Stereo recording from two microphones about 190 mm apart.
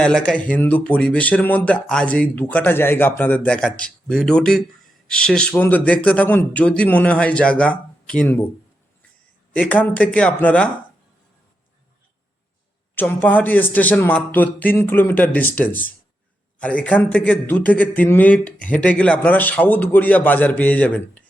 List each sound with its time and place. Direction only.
0.0 s a man's voice: 5° left (ahead or behind)
9.6 s a man's voice: 10° left (ahead or behind)
13.0 s a man's voice: 10° left (ahead or behind)